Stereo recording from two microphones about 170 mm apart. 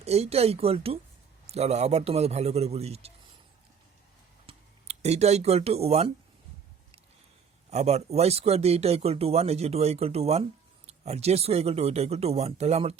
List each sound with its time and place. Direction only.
0.0 s speech: 40° right (ahead or behind)
4.4 s speech: 40° right (ahead or behind)
7.7 s speech: 40° right (ahead or behind)